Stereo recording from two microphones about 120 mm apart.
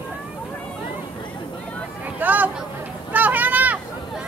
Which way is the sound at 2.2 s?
15° right (ahead or behind).